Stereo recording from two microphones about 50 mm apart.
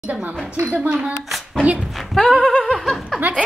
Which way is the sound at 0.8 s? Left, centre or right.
Right.